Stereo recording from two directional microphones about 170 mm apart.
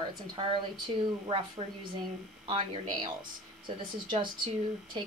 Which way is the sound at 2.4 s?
30° right (ahead or behind).